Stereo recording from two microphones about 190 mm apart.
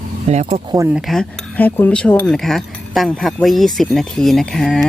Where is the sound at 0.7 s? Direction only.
15° right (ahead or behind).